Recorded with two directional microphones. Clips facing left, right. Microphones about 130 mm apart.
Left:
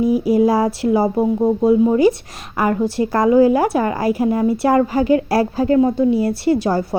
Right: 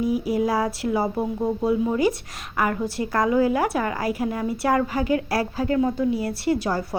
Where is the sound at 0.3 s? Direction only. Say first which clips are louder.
Left 8 dB; 30° left (ahead or behind).